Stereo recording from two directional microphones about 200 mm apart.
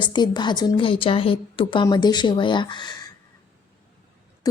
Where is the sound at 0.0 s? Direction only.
20° left (ahead or behind).